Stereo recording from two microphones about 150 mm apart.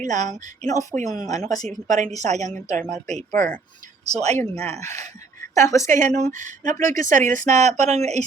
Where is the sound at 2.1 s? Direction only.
50° right (ahead or behind).